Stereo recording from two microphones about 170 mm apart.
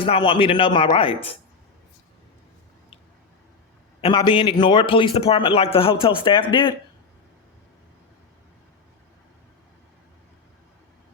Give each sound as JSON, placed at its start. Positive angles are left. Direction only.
{"t": 0.0, "sound": "speech", "side_deg": 30}
{"t": 4.0, "sound": "a man's voice", "side_deg": 25}